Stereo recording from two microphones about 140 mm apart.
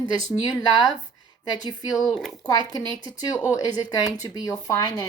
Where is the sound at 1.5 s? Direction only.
30° left (ahead or behind).